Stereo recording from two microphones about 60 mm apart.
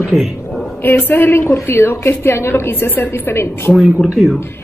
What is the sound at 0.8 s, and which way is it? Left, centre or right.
A woman's voice, left.